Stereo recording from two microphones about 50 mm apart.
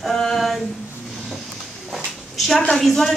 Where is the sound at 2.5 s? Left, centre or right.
Centre.